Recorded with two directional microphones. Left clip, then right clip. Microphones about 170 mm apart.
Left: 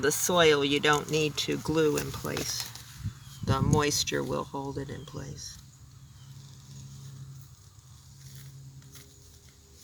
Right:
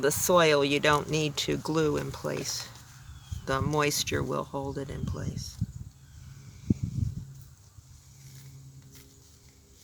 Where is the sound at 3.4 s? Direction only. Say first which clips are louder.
Even; 55° right (ahead or behind).